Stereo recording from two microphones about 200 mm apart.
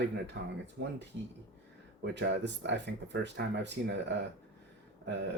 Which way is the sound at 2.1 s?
60° right (ahead or behind).